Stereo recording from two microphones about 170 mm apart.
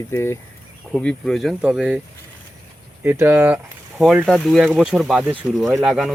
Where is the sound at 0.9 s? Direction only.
5° left (ahead or behind).